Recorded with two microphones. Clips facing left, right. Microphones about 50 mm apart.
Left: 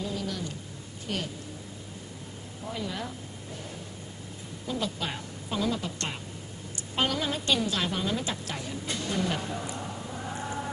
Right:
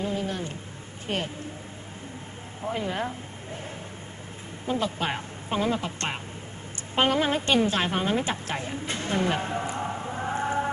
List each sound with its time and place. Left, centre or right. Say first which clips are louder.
0.0 s a sound: right 4 dB; right
1.0 s a woman's voice: right 4 dB; right
2.6 s a woman's voice: right 6 dB; right
4.6 s a woman's voice: right 5 dB; right